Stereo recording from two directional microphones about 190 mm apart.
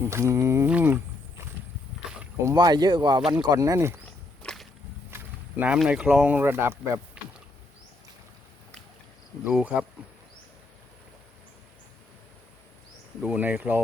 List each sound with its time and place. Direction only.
0.0 s speech: 15° right (ahead or behind)
2.4 s speech: 15° right (ahead or behind)
4.4 s whip: centre (ahead or behind)
5.1 s speech: 10° right (ahead or behind)
9.5 s speech: 5° right (ahead or behind)
13.2 s speech: 10° right (ahead or behind)